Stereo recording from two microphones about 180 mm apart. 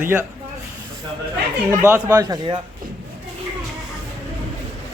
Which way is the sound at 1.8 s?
15° right (ahead or behind).